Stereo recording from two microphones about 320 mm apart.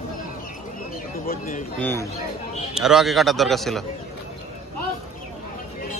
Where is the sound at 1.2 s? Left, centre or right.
Left.